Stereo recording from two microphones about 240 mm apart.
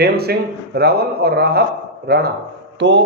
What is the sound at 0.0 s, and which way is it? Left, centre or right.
A man's voice, right.